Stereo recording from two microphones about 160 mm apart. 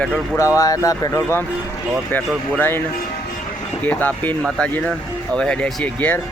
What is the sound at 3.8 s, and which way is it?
Speech, 10° left (ahead or behind).